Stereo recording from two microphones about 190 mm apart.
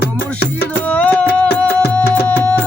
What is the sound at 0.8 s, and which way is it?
Music, 5° left (ahead or behind).